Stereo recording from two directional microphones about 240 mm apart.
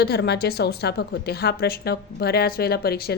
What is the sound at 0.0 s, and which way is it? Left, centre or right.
Speech, left.